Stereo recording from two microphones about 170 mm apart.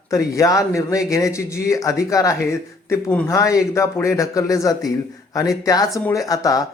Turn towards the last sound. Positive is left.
turn(degrees=20)  # may be behind; listen again after turning